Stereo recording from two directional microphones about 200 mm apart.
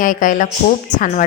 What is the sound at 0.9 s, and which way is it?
Speech, 20° left (ahead or behind).